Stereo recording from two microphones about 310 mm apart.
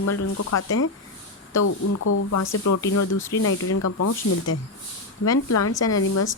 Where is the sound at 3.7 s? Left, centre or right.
Left.